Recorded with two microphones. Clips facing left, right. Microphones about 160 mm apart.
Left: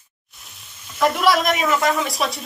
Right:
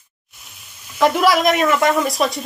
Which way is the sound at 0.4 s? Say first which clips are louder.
Even; centre (ahead or behind).